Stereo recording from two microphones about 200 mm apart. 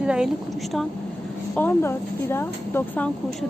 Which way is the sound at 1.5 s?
10° left (ahead or behind).